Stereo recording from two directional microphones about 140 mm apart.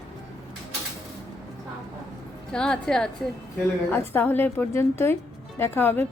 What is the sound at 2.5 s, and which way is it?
A woman's voice, 5° left (ahead or behind).